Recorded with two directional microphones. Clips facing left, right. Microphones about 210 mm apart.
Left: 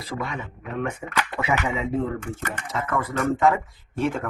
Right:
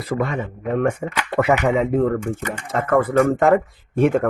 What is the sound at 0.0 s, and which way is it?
Speech, 55° right (ahead or behind).